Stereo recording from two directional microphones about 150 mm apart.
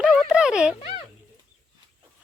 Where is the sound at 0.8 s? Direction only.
40° left (ahead or behind).